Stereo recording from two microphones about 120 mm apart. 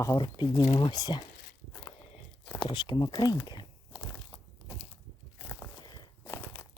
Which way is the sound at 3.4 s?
35° left (ahead or behind).